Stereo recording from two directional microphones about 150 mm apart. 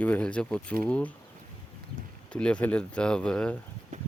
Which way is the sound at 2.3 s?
5° left (ahead or behind).